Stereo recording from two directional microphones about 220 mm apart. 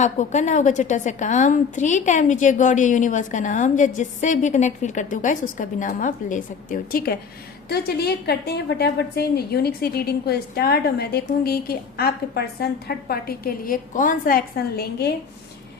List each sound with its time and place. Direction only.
0.0 s a woman's voice: 35° left (ahead or behind)